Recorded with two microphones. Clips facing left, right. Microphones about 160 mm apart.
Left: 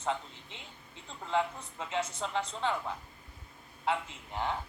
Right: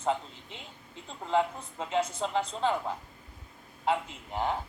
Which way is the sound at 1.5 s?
35° right (ahead or behind).